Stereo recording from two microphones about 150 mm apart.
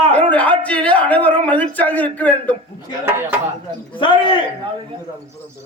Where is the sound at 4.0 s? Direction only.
35° left (ahead or behind).